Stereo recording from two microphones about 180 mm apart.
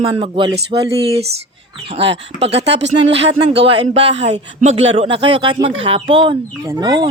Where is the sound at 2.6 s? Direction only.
75° right (ahead or behind).